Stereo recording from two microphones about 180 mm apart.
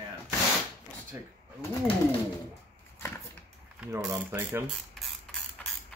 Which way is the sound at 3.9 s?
15° right (ahead or behind).